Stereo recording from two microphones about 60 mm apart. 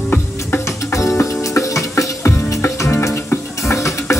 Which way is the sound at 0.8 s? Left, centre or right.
Left.